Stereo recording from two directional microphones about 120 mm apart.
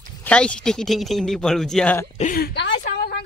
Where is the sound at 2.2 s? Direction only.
70° left (ahead or behind).